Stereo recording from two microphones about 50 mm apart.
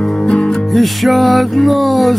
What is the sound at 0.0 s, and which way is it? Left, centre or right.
Music, centre.